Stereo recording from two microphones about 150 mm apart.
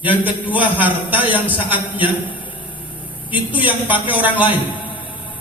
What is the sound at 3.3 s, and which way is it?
Speech, 10° right (ahead or behind).